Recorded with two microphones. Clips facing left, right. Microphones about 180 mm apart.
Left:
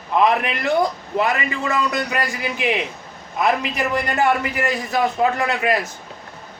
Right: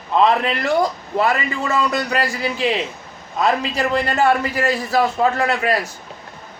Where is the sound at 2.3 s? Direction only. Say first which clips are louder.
Right 2 dB; 15° left (ahead or behind).